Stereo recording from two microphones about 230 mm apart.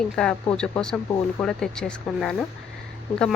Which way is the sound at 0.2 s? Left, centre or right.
Centre.